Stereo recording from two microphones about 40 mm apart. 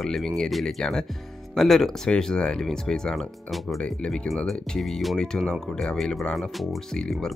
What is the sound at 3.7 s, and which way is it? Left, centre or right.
Speech, left.